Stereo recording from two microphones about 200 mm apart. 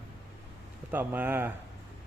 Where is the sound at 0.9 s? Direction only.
10° right (ahead or behind).